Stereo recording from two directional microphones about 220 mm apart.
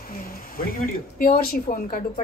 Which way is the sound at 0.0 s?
40° left (ahead or behind).